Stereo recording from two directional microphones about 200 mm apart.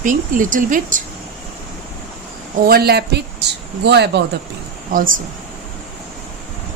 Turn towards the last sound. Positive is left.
turn(degrees=-45)  # may be behind; listen again after turning